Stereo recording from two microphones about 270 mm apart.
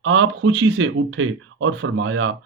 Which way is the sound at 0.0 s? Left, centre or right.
Right.